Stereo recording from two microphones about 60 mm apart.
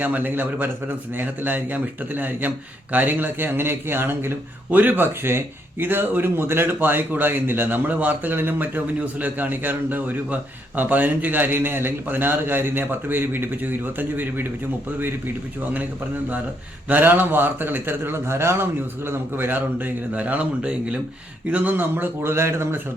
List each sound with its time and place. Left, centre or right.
0.0 s speech: right
16.9 s speech: right
21.5 s speech: right